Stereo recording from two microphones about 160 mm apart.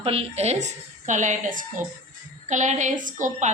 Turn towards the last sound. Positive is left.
turn(degrees=-55)  # may be behind; listen again after turning